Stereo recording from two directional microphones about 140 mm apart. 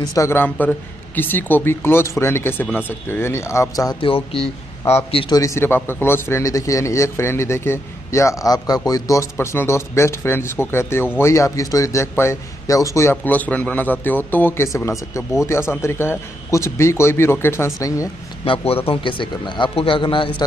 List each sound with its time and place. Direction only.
0.0 s speech: 25° left (ahead or behind)
4.0 s a man's voice: 40° left (ahead or behind)
5.3 s a man's voice: 20° left (ahead or behind)
18.4 s a man's voice: 45° left (ahead or behind)